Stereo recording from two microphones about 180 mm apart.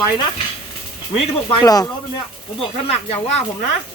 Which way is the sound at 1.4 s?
25° left (ahead or behind).